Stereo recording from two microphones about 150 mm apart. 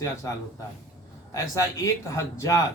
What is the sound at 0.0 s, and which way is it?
Speech, 20° left (ahead or behind).